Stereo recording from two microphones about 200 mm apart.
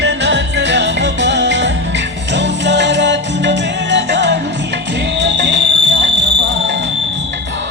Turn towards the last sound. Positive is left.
turn(degrees=-60)  # may be behind; listen again after turning